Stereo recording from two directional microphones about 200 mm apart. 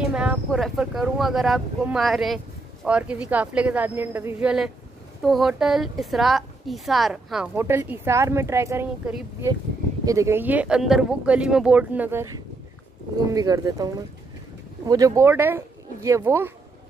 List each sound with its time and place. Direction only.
0.1 s speech: 5° right (ahead or behind)
13.3 s speech: 20° right (ahead or behind)